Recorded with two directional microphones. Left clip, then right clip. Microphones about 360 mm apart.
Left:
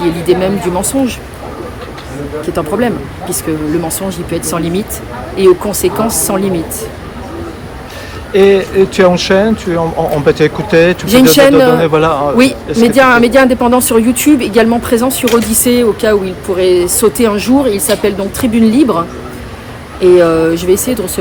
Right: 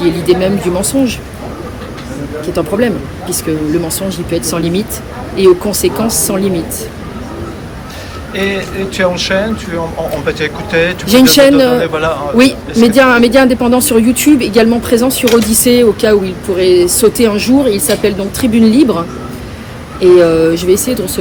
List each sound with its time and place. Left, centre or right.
0.0 s speech: centre
2.5 s speech: centre
8.3 s speech: centre
12.4 s speech: centre